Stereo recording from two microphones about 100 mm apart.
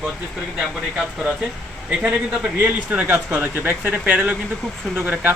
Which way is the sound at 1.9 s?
10° right (ahead or behind).